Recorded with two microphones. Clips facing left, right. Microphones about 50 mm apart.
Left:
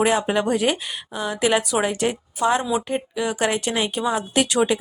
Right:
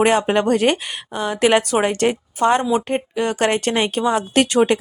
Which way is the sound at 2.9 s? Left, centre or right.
Right.